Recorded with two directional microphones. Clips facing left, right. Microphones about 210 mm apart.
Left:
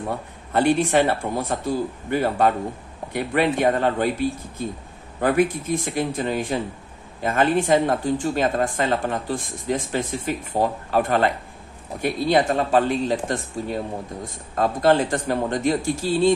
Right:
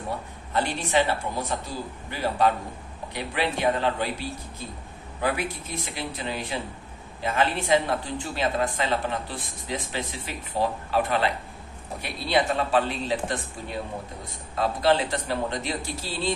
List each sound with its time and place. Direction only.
0.5 s speech: 55° left (ahead or behind)